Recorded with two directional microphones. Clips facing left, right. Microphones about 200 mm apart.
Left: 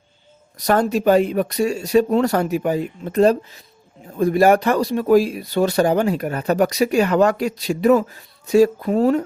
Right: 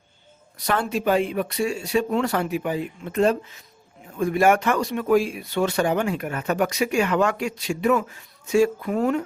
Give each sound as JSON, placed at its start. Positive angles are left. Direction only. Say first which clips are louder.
{"t": 0.6, "sound": "speech", "louder": "left 6 dB", "side_deg": 40}